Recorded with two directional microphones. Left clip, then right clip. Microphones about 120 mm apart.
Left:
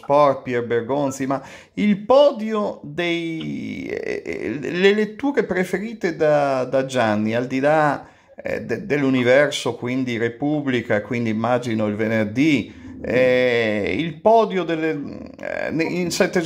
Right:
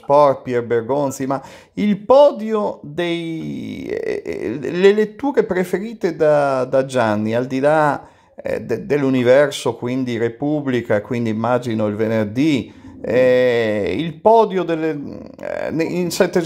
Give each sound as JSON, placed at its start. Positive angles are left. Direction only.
{"t": 0.1, "sound": "speech", "side_deg": -25}